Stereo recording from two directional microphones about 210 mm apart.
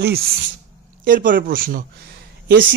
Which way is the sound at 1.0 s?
40° right (ahead or behind).